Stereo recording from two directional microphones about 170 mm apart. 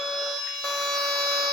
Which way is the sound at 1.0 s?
Centre (ahead or behind).